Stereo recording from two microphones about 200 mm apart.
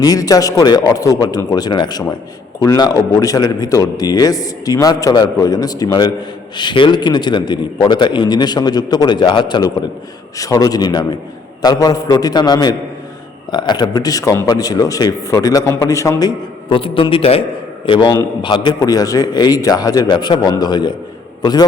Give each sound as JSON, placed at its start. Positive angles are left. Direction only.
{"t": 0.0, "sound": "a man's voice", "side_deg": 20}